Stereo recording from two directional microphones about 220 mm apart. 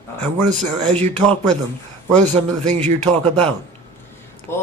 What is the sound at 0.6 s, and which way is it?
Speech, 30° right (ahead or behind).